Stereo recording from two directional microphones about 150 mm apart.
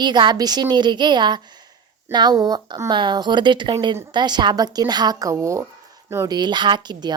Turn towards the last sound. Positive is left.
turn(degrees=-30)  # may be behind; listen again after turning